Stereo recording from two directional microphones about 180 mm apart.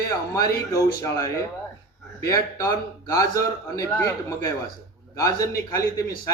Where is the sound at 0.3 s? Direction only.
20° left (ahead or behind).